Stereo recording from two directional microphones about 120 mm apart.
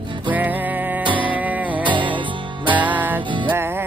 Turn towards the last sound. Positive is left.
turn(degrees=-15)  # may be behind; listen again after turning